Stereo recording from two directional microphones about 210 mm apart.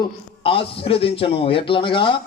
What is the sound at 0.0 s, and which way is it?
Speech, 25° left (ahead or behind).